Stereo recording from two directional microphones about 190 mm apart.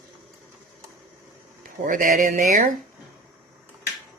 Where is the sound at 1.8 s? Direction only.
45° right (ahead or behind).